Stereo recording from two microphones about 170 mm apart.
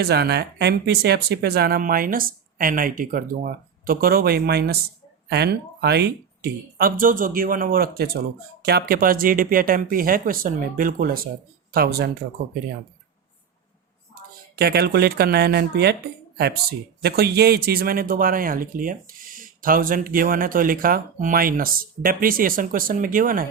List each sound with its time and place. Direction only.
0.0 s speech: 75° right (ahead or behind)
14.5 s speech: 70° right (ahead or behind)